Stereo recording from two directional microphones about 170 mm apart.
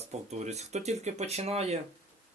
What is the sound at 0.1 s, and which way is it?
Speech, 40° right (ahead or behind).